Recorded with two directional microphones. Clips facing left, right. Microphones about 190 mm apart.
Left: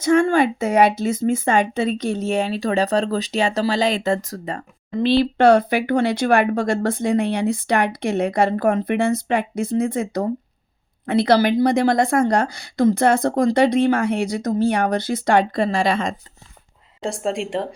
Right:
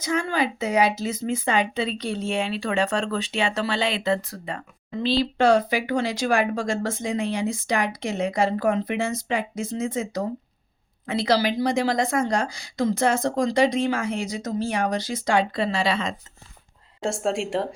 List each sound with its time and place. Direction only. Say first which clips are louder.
0.0 s speech: left 9 dB; 50° left (ahead or behind)
5.0 s speech: left 5 dB; 60° left (ahead or behind)
17.0 s a woman's voice: left 1 dB; centre (ahead or behind)